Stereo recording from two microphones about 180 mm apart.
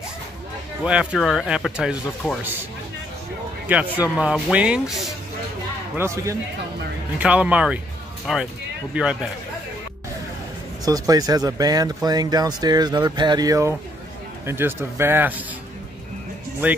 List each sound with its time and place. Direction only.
0.8 s speech: 5° right (ahead or behind)
3.6 s speech: 10° right (ahead or behind)
5.9 s speech: 15° right (ahead or behind)
10.9 s speech: 20° right (ahead or behind)